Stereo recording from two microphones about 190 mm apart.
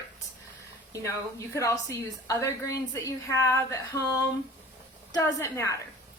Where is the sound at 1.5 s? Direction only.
15° left (ahead or behind).